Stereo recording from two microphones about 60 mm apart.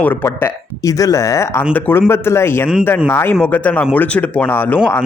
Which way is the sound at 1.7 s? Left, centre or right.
Left.